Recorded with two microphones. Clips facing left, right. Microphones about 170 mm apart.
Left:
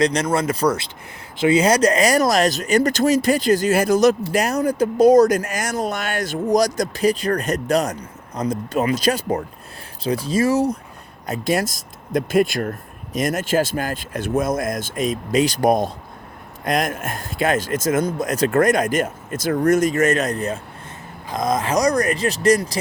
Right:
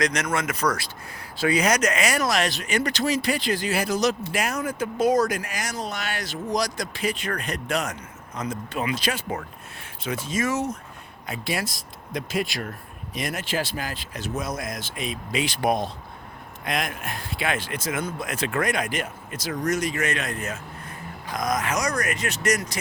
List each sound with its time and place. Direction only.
0.0 s speech: 30° left (ahead or behind)
11.3 s speech: 45° left (ahead or behind)